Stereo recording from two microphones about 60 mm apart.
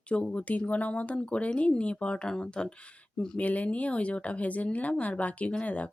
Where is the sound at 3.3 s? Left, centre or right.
Left.